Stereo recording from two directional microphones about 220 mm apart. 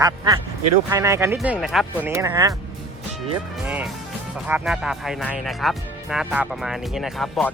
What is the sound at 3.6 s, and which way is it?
Speech, 5° right (ahead or behind).